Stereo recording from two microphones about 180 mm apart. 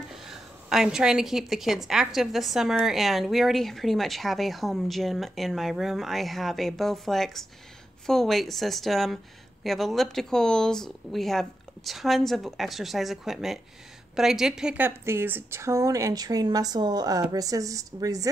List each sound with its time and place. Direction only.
0.1 s a woman's voice: centre (ahead or behind); by 18.3 s 20° right (ahead or behind)